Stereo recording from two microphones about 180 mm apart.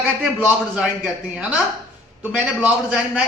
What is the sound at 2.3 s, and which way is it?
Speech, 10° right (ahead or behind).